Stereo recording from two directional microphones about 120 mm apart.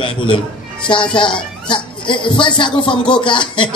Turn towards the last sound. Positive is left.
turn(degrees=40)  # may be behind; listen again after turning